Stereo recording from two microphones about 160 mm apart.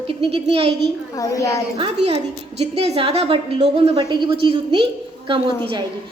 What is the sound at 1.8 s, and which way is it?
A woman's voice, 35° right (ahead or behind).